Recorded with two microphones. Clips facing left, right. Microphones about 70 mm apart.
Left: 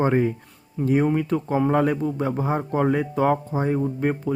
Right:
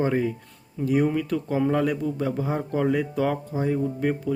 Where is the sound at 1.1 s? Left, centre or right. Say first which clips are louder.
Left 3 dB; left.